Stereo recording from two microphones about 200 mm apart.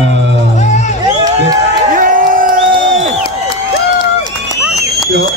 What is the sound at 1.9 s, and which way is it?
Crowd, 45° right (ahead or behind).